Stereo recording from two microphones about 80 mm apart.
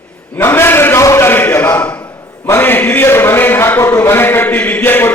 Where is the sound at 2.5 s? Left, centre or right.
Left.